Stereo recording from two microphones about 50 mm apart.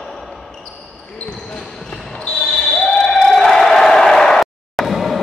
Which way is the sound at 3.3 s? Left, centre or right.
Centre.